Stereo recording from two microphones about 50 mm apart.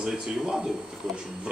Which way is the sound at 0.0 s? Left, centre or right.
Centre.